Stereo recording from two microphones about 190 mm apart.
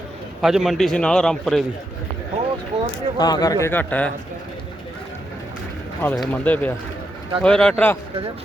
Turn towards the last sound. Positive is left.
turn(degrees=10)  # may be behind; listen again after turning